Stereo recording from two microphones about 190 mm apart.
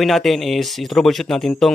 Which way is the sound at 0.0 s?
Centre (ahead or behind).